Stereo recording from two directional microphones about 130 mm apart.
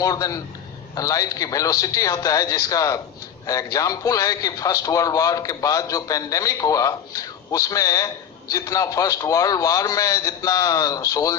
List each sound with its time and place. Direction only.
0.0 s a man's voice: 25° left (ahead or behind)